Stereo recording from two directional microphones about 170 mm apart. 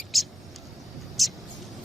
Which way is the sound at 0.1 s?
Centre (ahead or behind).